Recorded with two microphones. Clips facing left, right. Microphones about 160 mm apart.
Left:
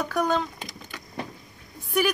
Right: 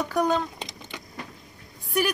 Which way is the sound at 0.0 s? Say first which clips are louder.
Right 1 dB; 10° right (ahead or behind).